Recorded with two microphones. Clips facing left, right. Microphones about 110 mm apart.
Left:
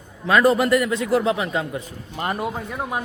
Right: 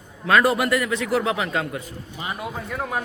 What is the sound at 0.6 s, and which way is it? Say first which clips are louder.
Speech: left 3 dB; 25° left (ahead or behind).